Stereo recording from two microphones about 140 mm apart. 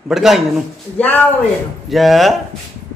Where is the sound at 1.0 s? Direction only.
10° left (ahead or behind).